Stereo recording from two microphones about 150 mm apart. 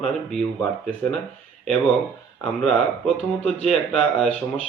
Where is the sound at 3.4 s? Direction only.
Centre (ahead or behind).